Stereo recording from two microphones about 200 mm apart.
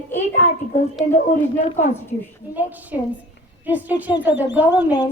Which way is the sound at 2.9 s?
10° right (ahead or behind).